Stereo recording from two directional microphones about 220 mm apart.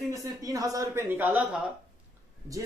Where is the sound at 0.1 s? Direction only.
15° right (ahead or behind).